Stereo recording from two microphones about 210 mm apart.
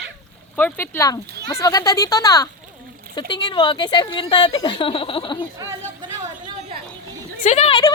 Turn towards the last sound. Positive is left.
turn(degrees=20)  # may be behind; listen again after turning